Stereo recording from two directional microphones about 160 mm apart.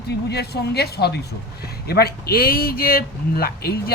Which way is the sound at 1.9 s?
75° left (ahead or behind).